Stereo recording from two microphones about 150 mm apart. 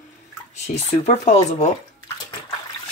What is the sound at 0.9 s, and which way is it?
Speech, 50° left (ahead or behind).